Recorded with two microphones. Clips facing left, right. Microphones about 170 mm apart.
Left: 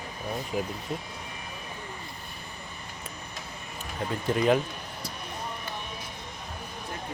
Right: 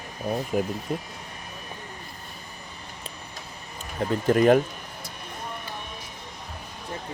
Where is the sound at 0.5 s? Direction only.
50° right (ahead or behind).